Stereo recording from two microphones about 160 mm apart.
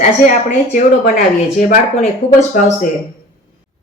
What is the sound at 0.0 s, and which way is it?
A woman's voice, 50° left (ahead or behind).